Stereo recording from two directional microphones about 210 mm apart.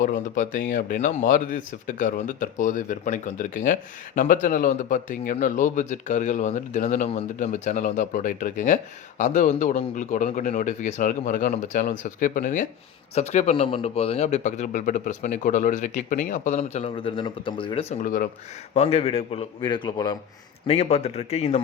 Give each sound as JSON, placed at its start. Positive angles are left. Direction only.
{"t": 0.0, "sound": "speech", "side_deg": 40}
{"t": 18.0, "sound": "speech", "side_deg": 40}
{"t": 18.7, "sound": "a man's voice", "side_deg": 30}